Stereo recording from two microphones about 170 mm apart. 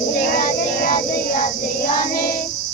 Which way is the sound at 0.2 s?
55° left (ahead or behind).